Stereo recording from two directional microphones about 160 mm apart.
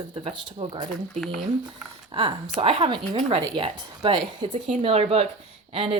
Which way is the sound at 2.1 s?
35° right (ahead or behind).